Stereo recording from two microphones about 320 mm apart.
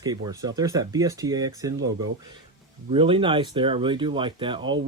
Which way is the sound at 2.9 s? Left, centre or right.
Centre.